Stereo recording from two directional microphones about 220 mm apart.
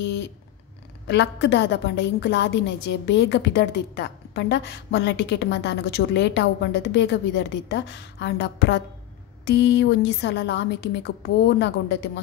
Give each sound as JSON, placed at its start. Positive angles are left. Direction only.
{"t": 0.0, "sound": "cat", "side_deg": 55}
{"t": 1.0, "sound": "a woman's voice", "side_deg": 50}